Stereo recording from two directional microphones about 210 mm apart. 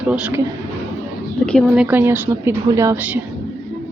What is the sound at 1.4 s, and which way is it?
A woman's voice, centre (ahead or behind).